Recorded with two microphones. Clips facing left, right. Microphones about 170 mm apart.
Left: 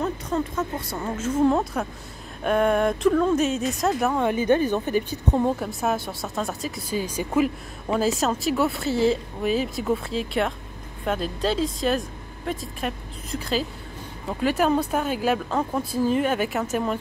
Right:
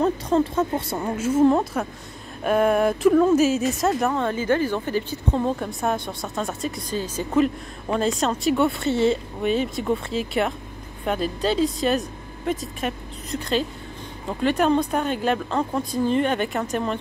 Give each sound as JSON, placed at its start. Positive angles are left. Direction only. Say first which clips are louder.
{"t": 0.0, "sound": "a woman's voice", "louder": "right 6 dB", "side_deg": -30}
{"t": 1.0, "sound": "a woman's voice", "louder": "right 3 dB", "side_deg": -10}
{"t": 5.6, "sound": "a woman's voice", "louder": "even", "side_deg": 0}